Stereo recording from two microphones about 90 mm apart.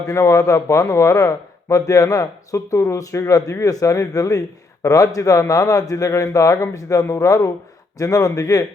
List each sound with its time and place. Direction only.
0.1 s a man's voice: 40° left (ahead or behind)